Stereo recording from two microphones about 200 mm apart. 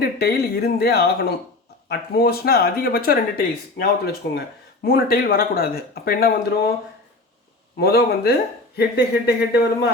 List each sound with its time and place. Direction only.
0.0 s speech: 50° left (ahead or behind)
7.8 s speech: 50° left (ahead or behind)